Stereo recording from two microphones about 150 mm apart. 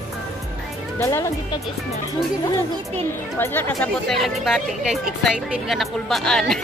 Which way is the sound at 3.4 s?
15° left (ahead or behind).